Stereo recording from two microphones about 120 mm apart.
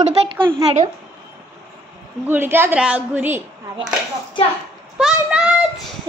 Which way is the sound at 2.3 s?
20° right (ahead or behind).